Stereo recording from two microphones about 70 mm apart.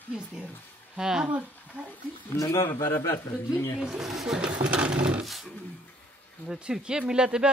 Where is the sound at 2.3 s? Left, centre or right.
Left.